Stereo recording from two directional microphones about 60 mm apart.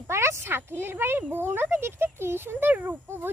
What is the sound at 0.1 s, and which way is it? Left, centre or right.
Speech, right.